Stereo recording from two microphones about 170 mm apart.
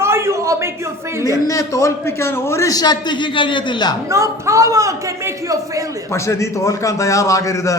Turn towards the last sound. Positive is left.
turn(degrees=15)  # may be behind; listen again after turning